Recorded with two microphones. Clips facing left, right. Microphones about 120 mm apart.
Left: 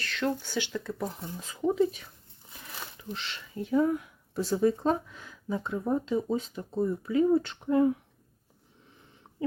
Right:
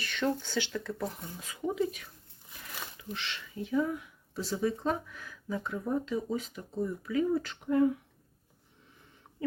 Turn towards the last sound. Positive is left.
turn(degrees=30)  # may be behind; listen again after turning